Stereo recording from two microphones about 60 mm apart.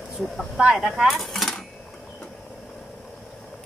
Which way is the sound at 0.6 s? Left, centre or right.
Centre.